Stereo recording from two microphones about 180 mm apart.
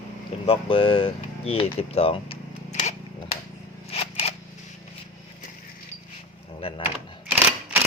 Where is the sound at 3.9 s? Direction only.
35° left (ahead or behind).